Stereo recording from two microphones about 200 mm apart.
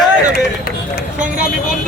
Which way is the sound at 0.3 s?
50° left (ahead or behind).